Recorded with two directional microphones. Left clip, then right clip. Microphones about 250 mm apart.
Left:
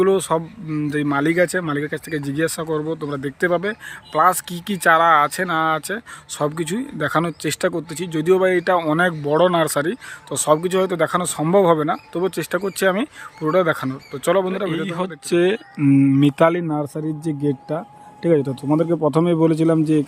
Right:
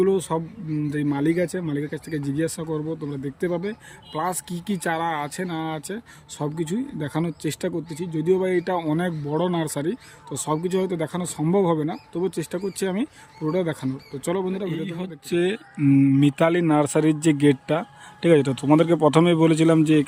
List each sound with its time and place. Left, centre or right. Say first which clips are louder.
0.0 s speech: left 4 dB; centre
2.8 s speech: left 5 dB; centre
3.1 s speech: left 9 dB; centre